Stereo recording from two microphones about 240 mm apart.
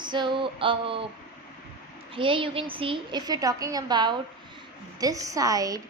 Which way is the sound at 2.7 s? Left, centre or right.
Right.